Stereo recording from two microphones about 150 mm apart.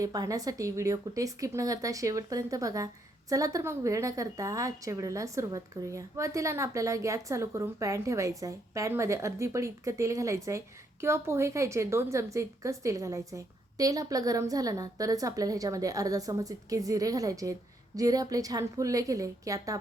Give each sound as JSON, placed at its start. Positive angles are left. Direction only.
{"t": 0.0, "sound": "speech", "side_deg": -25}